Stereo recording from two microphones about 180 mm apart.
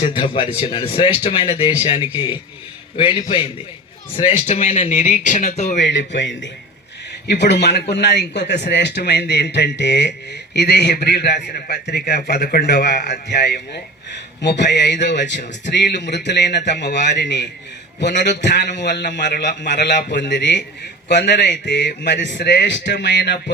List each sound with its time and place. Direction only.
0.1 s speech: 30° left (ahead or behind)
5.8 s a man's voice: 75° left (ahead or behind)